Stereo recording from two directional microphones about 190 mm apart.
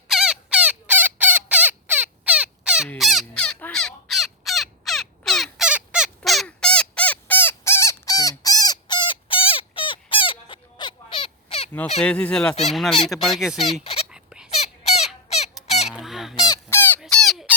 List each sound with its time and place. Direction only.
0.1 s fowl: 5° right (ahead or behind)
2.9 s crow: centre (ahead or behind); by 11.7 s 30° left (ahead or behind)
12.0 s speech: 5° left (ahead or behind)
13.8 s a sound: 30° left (ahead or behind)
14.1 s a sound: 5° right (ahead or behind)
14.5 s crow: 35° left (ahead or behind)
15.6 s honk: 35° left (ahead or behind)
15.9 s honk: centre (ahead or behind)
16.4 s goose: 15° left (ahead or behind)
17.0 s a sound: centre (ahead or behind)